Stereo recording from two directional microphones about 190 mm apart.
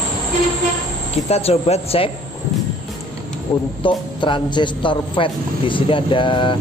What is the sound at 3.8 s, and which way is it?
A man's voice, 25° left (ahead or behind).